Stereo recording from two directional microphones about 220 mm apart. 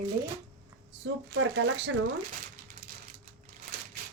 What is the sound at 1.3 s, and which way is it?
Speech, 60° right (ahead or behind).